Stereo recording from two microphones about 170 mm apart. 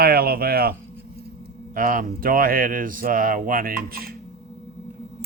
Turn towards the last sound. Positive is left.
turn(degrees=-60)  # may be behind; listen again after turning